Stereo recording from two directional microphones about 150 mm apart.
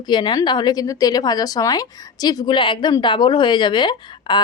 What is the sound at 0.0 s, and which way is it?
A woman's voice, 30° left (ahead or behind).